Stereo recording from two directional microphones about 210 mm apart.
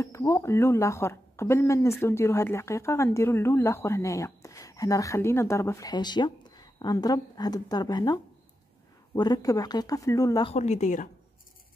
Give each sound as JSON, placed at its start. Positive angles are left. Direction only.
{"t": 0.0, "sound": "speech", "side_deg": 15}
{"t": 10.5, "sound": "a woman's voice", "side_deg": 35}